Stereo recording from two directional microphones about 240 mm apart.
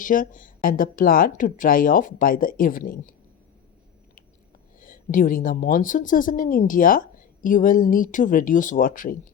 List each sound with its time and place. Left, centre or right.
0.0 s speech: left
4.8 s speech: left